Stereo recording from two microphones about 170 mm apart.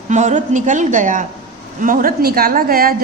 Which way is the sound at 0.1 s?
45° right (ahead or behind).